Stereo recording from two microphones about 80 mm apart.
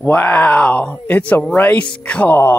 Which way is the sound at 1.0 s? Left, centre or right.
Centre.